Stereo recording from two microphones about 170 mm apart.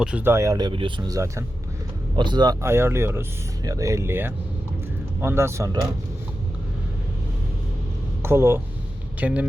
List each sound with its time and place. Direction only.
0.0 s speech: 10° right (ahead or behind)
8.2 s speech: 15° right (ahead or behind)